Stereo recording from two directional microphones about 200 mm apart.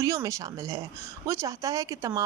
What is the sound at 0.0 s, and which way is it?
Speech, 15° right (ahead or behind).